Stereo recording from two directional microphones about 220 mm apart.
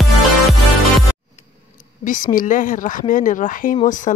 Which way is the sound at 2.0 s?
35° left (ahead or behind).